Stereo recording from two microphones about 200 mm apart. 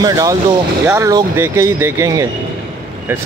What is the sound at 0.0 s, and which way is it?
Speech, 15° right (ahead or behind).